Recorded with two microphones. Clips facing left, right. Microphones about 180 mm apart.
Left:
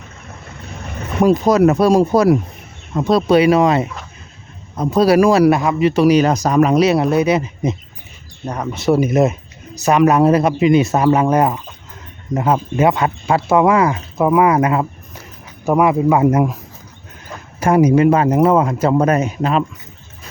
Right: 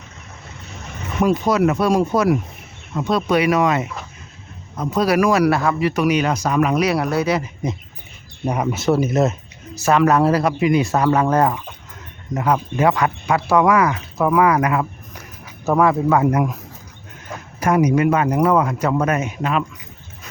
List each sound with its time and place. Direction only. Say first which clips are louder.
1.2 s speech: left 5 dB; 40° left (ahead or behind); by 7.8 s 20° left (ahead or behind)
8.4 s speech: right 3 dB; 10° right (ahead or behind)
8.9 s a man's voice: left 4 dB; 15° left (ahead or behind)
15.6 s a man's voice: left 3 dB; 15° left (ahead or behind)
17.6 s speech: left 4 dB; 30° left (ahead or behind)